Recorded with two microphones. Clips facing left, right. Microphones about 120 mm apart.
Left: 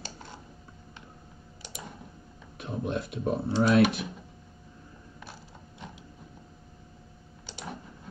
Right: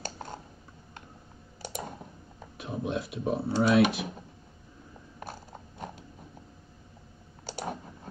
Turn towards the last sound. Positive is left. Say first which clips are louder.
# right 5 dB
turn(degrees=-45)  # may be behind; listen again after turning